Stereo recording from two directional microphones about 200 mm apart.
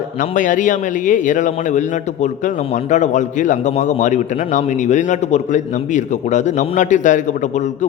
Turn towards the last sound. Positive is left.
turn(degrees=35)  # may be behind; listen again after turning